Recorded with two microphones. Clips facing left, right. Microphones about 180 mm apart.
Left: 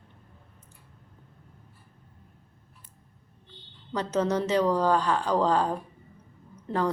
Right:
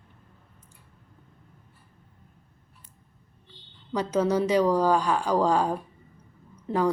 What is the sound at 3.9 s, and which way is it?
A woman's voice, 10° right (ahead or behind).